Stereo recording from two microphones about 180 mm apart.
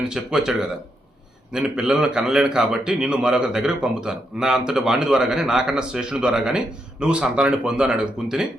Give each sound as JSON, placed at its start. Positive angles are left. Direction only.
{"t": 0.0, "sound": "a man's voice", "side_deg": -5}
{"t": 1.5, "sound": "a man's voice", "side_deg": -5}